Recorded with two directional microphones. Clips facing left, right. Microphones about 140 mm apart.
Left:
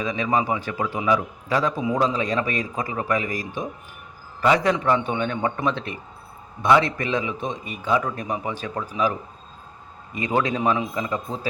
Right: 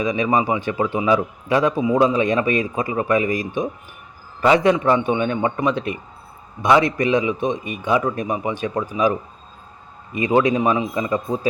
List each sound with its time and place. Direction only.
0.0 s a man's voice: 20° right (ahead or behind)
10.2 s a man's voice: 20° right (ahead or behind)